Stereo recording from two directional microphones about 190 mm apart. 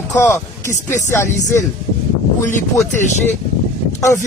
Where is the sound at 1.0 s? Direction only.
15° left (ahead or behind).